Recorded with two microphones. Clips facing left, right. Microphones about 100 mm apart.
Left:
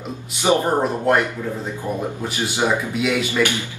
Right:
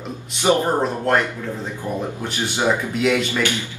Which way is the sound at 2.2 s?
10° left (ahead or behind).